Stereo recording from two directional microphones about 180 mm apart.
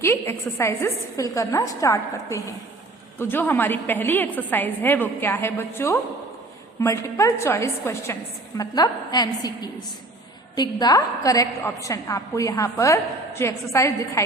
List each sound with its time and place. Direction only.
0.0 s a woman's voice: 15° left (ahead or behind)